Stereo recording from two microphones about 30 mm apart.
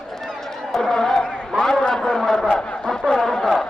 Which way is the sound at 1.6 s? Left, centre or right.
Centre.